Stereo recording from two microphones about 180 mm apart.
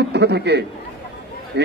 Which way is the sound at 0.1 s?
65° right (ahead or behind).